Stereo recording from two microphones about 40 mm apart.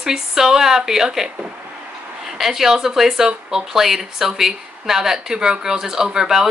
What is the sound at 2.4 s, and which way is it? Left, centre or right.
Speech, centre.